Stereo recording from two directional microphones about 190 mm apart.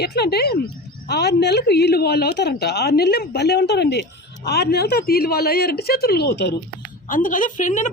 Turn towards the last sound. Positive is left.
turn(degrees=40)  # may be behind; listen again after turning